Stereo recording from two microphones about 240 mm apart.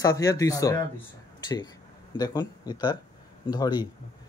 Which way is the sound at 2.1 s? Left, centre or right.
Centre.